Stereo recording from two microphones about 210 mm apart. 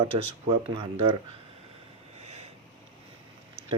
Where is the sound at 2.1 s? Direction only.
30° right (ahead or behind).